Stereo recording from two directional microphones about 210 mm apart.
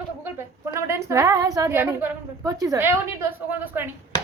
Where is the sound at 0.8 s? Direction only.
15° right (ahead or behind).